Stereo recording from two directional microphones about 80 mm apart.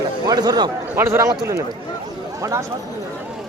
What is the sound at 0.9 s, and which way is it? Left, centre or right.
Speech, right.